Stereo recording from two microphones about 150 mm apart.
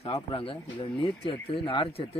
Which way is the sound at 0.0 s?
35° left (ahead or behind).